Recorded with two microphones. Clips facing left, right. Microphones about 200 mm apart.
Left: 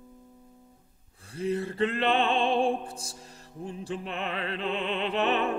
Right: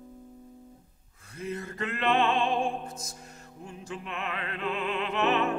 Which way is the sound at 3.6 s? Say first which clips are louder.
Left 5 dB; 35° left (ahead or behind).